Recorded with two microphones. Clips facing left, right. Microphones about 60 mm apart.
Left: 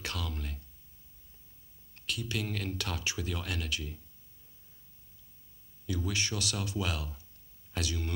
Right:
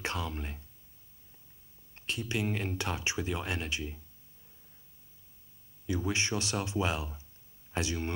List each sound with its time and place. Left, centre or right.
0.0 s a sound: right
2.0 s speech: right
5.9 s speech: right